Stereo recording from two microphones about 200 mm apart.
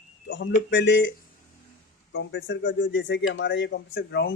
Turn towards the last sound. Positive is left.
turn(degrees=60)  # may be behind; listen again after turning